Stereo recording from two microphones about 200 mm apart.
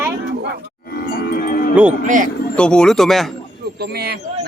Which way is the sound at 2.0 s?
40° right (ahead or behind).